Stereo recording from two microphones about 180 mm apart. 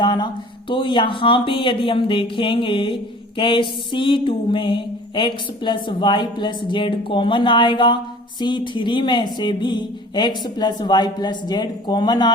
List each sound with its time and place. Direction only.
0.0 s speech: 25° left (ahead or behind)